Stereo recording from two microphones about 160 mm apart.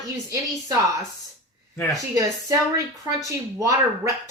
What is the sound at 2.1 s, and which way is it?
A woman's voice, 20° right (ahead or behind).